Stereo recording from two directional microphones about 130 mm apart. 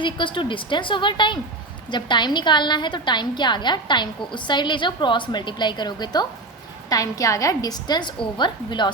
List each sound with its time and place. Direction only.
0.0 s a woman's voice: 40° left (ahead or behind)